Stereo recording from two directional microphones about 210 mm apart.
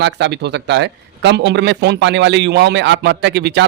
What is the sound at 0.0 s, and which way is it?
Speech, 55° right (ahead or behind).